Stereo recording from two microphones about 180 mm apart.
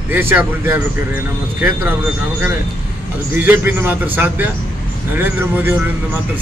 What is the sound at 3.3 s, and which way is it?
Speech, 10° right (ahead or behind).